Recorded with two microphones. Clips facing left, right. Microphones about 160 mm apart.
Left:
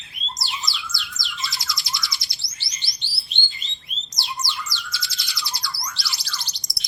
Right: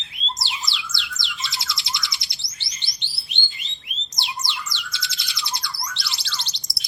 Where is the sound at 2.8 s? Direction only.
20° right (ahead or behind).